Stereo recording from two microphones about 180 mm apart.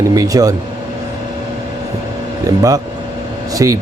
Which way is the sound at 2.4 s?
20° right (ahead or behind).